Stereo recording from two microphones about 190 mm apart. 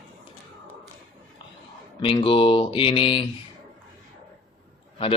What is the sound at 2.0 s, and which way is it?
Speech, 25° left (ahead or behind).